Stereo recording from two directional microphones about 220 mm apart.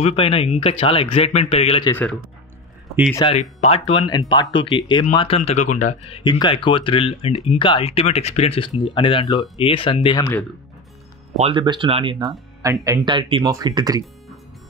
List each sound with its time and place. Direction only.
0.0 s speech: 25° left (ahead or behind)
3.3 s speech: 30° left (ahead or behind)
11.3 s speech: 25° right (ahead or behind)